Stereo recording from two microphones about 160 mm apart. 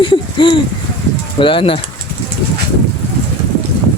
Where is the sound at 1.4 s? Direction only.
35° left (ahead or behind).